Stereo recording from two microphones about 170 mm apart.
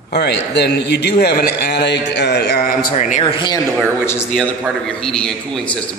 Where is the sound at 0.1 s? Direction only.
80° left; by 3.3 s 45° left (ahead or behind).